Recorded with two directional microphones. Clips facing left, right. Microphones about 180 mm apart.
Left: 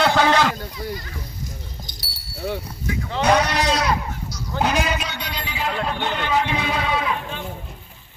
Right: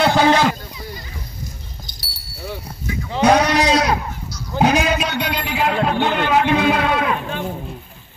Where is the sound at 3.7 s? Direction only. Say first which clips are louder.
Right 4 dB; 45° right (ahead or behind).